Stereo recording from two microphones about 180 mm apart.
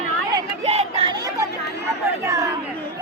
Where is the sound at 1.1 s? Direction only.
20° right (ahead or behind).